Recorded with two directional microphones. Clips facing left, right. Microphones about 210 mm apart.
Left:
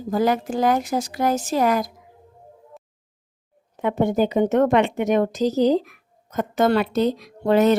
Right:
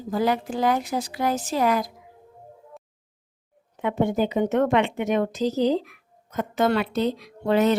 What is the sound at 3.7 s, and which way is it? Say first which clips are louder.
A woman's voice: left 3 dB; 40° left (ahead or behind).